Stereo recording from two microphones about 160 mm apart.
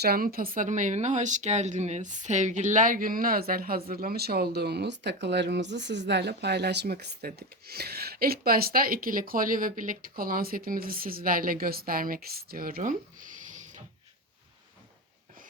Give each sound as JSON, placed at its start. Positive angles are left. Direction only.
{"t": 0.0, "sound": "speech", "side_deg": -70}